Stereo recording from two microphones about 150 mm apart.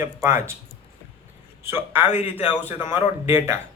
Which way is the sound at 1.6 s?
15° right (ahead or behind).